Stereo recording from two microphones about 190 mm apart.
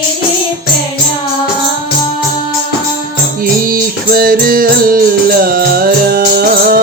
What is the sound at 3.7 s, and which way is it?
Music, 50° right (ahead or behind).